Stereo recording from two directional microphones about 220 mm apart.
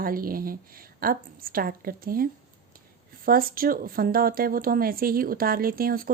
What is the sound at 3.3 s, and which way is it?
A woman's voice, 40° right (ahead or behind).